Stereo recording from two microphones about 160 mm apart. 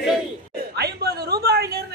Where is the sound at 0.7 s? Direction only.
85° right.